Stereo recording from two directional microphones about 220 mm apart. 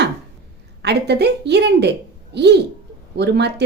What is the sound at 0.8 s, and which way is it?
A woman's voice, 50° right (ahead or behind).